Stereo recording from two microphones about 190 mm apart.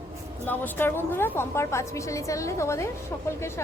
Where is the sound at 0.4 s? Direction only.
10° left (ahead or behind).